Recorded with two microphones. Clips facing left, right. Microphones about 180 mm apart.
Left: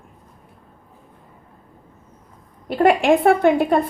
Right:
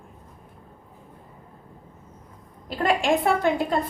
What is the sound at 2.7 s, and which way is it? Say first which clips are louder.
A woman's voice: left 7 dB; 60° left (ahead or behind).